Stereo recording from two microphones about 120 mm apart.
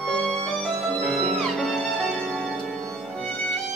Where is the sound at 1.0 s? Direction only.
Centre (ahead or behind).